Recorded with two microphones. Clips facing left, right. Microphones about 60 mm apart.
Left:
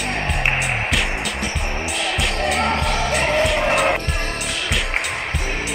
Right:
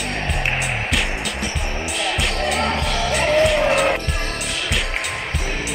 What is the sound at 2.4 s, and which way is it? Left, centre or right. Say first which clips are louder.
Music: left 2 dB; centre.